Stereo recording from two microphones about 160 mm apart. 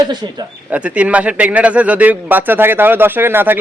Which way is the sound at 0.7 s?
10° right (ahead or behind).